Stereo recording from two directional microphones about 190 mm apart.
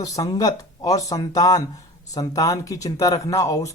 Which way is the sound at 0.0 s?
20° left (ahead or behind).